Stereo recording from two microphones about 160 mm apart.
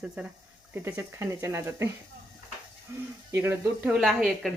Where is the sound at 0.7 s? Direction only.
15° right (ahead or behind).